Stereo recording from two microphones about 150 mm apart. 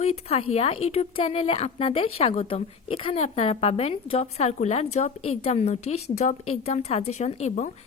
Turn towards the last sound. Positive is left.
turn(degrees=55)  # may be behind; listen again after turning